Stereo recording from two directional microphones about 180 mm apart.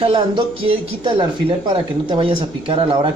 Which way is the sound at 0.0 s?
30° right (ahead or behind).